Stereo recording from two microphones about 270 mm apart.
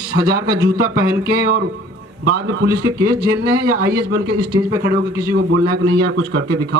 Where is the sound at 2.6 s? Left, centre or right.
Right.